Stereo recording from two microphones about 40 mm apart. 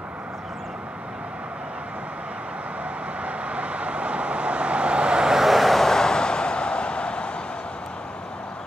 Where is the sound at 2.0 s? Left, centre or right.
Right.